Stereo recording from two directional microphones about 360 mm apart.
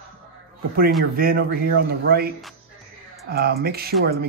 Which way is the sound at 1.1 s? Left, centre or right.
Right.